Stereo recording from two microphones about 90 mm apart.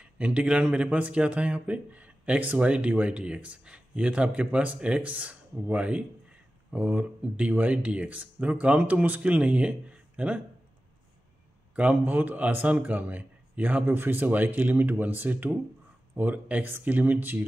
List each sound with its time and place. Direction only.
0.0 s speech: 15° right (ahead or behind)
11.7 s a man's voice: 15° right (ahead or behind)